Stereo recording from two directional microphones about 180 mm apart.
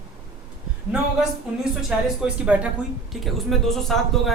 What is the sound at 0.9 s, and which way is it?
Speech, 5° right (ahead or behind).